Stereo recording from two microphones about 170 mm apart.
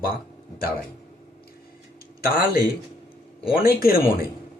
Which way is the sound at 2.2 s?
60° left (ahead or behind).